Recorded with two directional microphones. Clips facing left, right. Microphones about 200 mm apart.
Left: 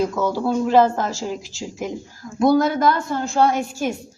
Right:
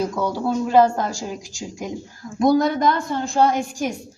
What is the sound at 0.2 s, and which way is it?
Speech, 15° right (ahead or behind).